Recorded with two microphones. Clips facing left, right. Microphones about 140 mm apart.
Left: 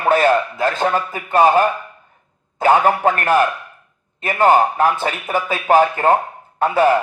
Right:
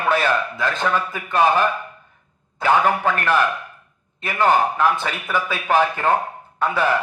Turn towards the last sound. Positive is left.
turn(degrees=45)  # may be behind; listen again after turning